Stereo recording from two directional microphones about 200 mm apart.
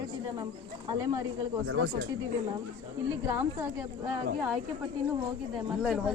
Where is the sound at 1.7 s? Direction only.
90° right.